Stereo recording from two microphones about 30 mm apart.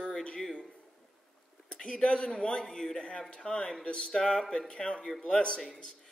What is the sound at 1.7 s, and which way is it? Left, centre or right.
Speech, left.